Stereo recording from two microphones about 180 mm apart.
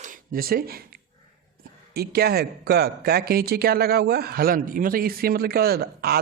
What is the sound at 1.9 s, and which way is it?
Speech, 60° right (ahead or behind).